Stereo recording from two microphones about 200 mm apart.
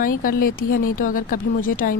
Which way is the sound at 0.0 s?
45° left (ahead or behind).